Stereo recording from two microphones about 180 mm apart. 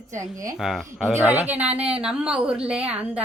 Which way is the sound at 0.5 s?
Centre (ahead or behind).